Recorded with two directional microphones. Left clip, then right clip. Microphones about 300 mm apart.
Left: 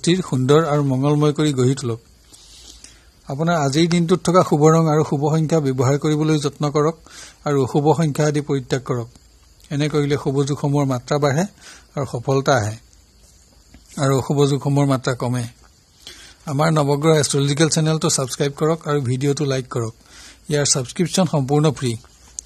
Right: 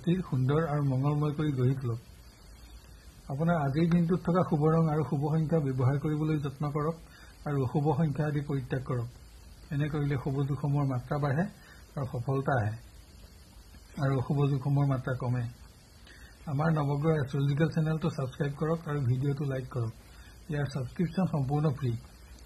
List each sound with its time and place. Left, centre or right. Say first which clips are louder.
0.0 s a man's voice: left 13 dB; left
3.3 s a man's voice: left 11 dB; left
13.9 s a man's voice: left 14 dB; left
16.4 s a man's voice: left 14 dB; left